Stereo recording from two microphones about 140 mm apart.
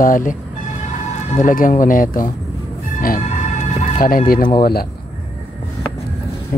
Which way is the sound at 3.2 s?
55° left (ahead or behind).